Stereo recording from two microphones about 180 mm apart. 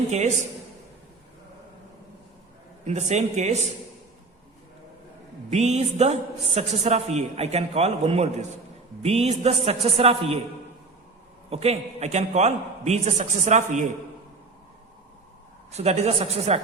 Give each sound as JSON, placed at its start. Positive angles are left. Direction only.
{"t": 2.8, "sound": "a woman's voice", "side_deg": -40}
{"t": 5.5, "sound": "a woman's voice", "side_deg": -40}
{"t": 11.4, "sound": "a woman's voice", "side_deg": -35}
{"t": 15.7, "sound": "a woman's voice", "side_deg": -35}